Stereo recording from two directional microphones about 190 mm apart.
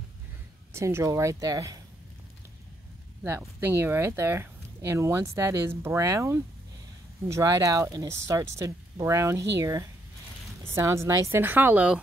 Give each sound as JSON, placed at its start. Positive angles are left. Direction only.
{"t": 0.7, "sound": "speech", "side_deg": -15}
{"t": 3.3, "sound": "speech", "side_deg": -10}